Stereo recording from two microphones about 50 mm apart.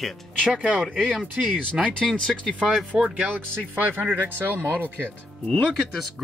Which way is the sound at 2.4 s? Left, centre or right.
Centre.